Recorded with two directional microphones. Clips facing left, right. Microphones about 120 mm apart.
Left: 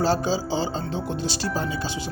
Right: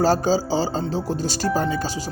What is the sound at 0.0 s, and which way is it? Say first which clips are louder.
Speech: right 4 dB; 40° right (ahead or behind).